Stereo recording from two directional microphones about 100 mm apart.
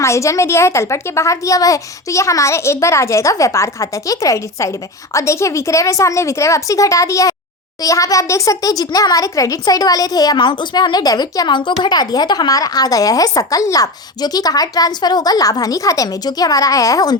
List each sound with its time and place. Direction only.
0.0 s a woman's voice: 30° left (ahead or behind)